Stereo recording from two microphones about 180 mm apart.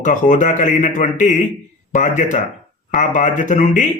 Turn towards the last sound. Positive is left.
turn(degrees=45)  # may be behind; listen again after turning